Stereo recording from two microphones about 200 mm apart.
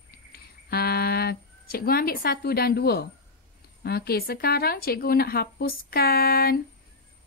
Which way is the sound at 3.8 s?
50° left (ahead or behind).